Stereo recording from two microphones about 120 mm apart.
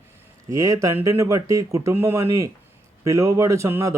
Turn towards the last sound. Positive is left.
turn(degrees=-25)  # may be behind; listen again after turning